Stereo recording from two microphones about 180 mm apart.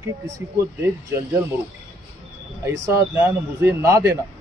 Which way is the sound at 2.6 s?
15° right (ahead or behind).